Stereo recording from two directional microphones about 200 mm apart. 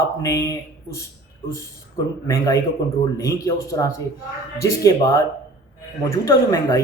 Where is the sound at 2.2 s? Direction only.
15° left (ahead or behind).